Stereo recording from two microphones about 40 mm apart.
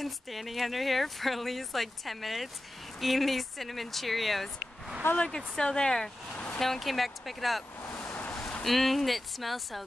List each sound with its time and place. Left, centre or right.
0.0 s speech: centre
5.1 s speech: left
6.6 s speech: centre
8.1 s a sound: left
8.6 s speech: centre